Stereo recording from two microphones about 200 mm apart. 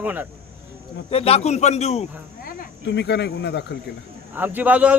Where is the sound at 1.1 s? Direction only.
30° left (ahead or behind).